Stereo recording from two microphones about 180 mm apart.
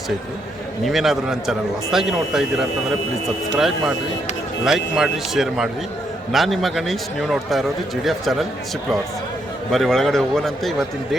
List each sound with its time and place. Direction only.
0.9 s a man's voice: centre (ahead or behind)
9.7 s a man's voice: centre (ahead or behind)